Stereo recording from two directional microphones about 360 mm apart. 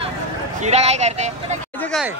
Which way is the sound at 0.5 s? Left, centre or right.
Centre.